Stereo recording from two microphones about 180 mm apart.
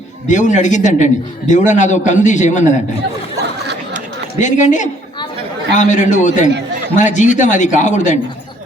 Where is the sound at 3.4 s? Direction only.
70° right (ahead or behind).